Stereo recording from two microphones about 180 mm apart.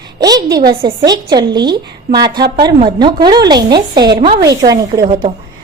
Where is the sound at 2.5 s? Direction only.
25° right (ahead or behind).